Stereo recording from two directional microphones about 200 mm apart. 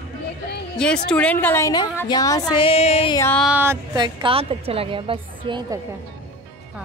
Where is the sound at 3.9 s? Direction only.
25° right (ahead or behind).